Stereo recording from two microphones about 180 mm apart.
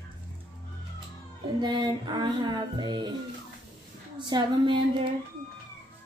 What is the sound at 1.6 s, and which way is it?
Music, 25° right (ahead or behind).